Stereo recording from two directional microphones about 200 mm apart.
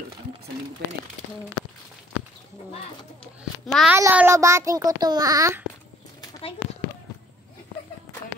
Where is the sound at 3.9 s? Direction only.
10° right (ahead or behind).